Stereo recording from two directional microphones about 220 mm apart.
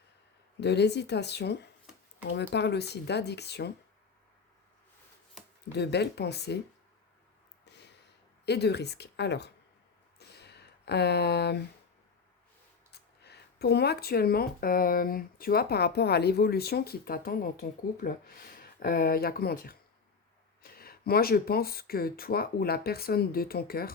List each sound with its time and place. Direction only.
0.6 s speech: 50° left (ahead or behind)
5.7 s speech: 50° left (ahead or behind)
7.6 s a sound: 50° left (ahead or behind)
8.4 s speech: 50° left (ahead or behind)
10.2 s a sound: 50° left (ahead or behind)
12.9 s speech: 50° left (ahead or behind)